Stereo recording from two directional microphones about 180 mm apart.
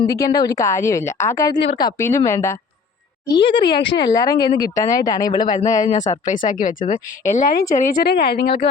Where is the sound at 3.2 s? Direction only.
25° left (ahead or behind).